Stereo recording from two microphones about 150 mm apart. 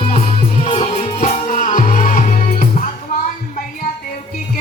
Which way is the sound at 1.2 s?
60° left (ahead or behind).